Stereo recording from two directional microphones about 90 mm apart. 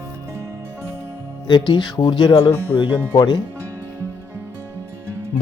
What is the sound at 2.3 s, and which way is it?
Speech, 65° left (ahead or behind).